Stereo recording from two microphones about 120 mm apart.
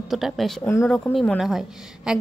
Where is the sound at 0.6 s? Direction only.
25° left (ahead or behind).